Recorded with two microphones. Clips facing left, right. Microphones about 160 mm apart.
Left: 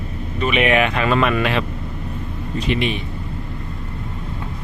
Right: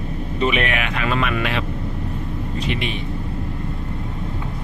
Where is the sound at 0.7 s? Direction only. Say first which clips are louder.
Left 6 dB; 35° left (ahead or behind).